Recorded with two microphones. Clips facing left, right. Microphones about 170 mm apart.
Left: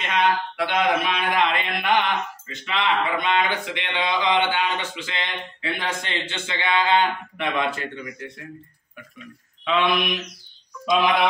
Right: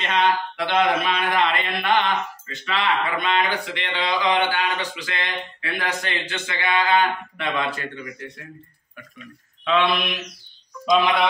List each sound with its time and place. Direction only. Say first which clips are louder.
0.1 s speech: even; 10° left (ahead or behind)
9.7 s mantra: right 1 dB; 15° left (ahead or behind)